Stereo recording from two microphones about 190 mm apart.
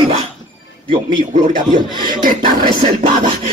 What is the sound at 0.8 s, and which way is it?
Speech, 25° right (ahead or behind).